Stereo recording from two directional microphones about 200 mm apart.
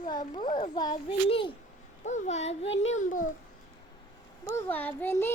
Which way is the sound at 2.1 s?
35° left (ahead or behind).